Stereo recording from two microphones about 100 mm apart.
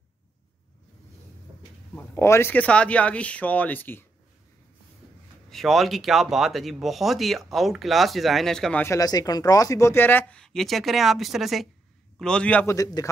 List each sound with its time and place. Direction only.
2.0 s speech: 25° left (ahead or behind)
2.5 s speech: 15° left (ahead or behind)
5.5 s speech: centre (ahead or behind)
8.8 s speech: 35° left (ahead or behind); by 10.4 s 20° left (ahead or behind)
10.4 s speech: 5° left (ahead or behind)
12.2 s speech: 10° left (ahead or behind)
12.6 s speech: 35° left (ahead or behind)